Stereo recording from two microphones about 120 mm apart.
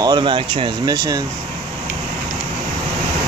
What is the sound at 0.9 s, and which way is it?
Speech, 30° right (ahead or behind).